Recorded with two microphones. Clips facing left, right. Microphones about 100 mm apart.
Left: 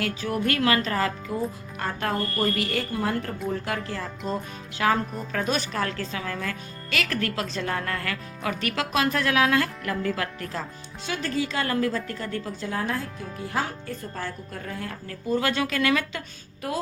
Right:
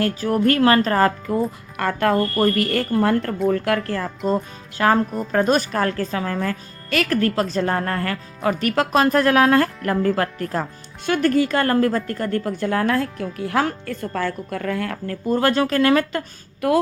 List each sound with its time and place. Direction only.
0.0 s a woman's voice: 40° right (ahead or behind)
1.7 s a woman's voice: 65° right (ahead or behind)
15.3 s speech: 45° right (ahead or behind)
16.6 s a woman's voice: 65° right (ahead or behind)